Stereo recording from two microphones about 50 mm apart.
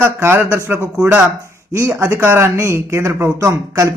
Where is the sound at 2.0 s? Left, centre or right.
Right.